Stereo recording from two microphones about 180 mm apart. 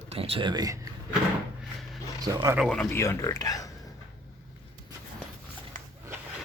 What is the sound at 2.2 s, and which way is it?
Speech, 20° right (ahead or behind).